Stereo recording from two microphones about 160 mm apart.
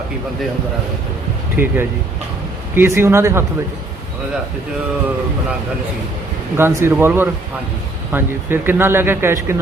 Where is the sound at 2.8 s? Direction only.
15° right (ahead or behind).